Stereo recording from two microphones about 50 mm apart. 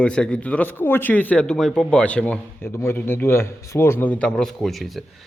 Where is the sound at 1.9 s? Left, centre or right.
Left.